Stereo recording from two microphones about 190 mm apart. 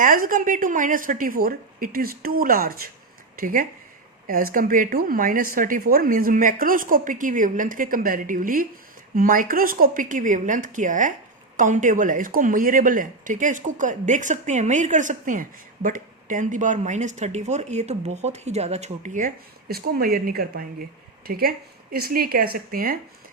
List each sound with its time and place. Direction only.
0.0 s speech: 45° right (ahead or behind)